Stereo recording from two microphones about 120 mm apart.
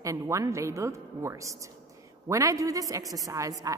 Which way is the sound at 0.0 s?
25° right (ahead or behind).